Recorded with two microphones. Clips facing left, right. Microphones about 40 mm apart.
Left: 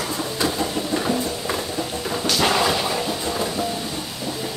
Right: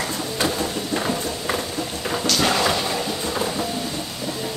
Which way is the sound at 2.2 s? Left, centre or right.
Centre.